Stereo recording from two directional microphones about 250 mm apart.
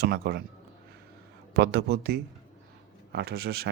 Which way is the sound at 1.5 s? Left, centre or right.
Right.